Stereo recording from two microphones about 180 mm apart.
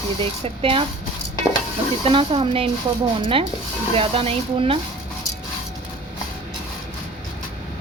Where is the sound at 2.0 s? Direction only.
30° right (ahead or behind).